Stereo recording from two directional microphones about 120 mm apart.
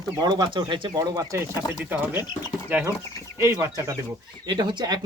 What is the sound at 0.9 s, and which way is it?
Speech, 30° right (ahead or behind).